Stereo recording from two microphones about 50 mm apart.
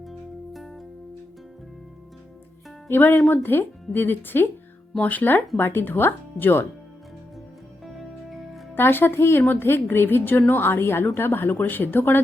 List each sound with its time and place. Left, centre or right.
0.0 s music: centre
2.8 s a woman's voice: left
7.9 s music: centre
8.7 s a woman's voice: left